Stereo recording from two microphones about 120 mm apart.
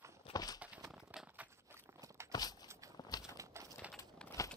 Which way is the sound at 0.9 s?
5° right (ahead or behind).